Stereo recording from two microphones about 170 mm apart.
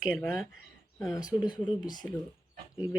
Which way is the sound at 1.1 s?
20° left (ahead or behind).